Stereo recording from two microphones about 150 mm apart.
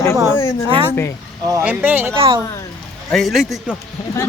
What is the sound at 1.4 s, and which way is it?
Speech, 15° right (ahead or behind).